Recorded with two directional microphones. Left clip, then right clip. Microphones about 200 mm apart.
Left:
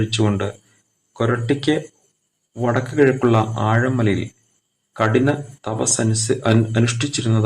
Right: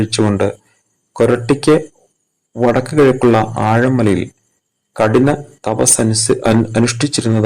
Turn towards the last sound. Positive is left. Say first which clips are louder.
# right 6 dB
turn(degrees=-20)  # may be behind; listen again after turning